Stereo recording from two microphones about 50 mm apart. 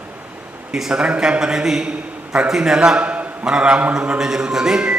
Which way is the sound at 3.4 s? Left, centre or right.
Centre.